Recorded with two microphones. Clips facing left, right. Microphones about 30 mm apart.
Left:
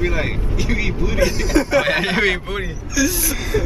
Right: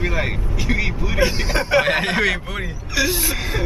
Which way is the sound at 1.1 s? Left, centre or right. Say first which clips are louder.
Left 2 dB; right.